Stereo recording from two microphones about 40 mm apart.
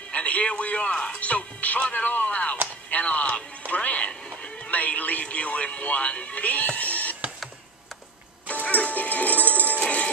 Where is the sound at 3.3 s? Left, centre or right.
Left.